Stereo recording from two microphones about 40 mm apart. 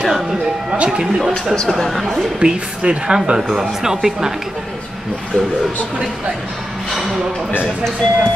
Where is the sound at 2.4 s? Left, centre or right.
Right.